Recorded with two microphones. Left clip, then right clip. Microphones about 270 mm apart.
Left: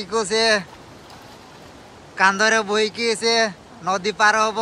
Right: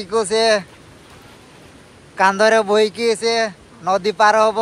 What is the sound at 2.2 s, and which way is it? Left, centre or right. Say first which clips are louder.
Speech: right 3 dB; centre.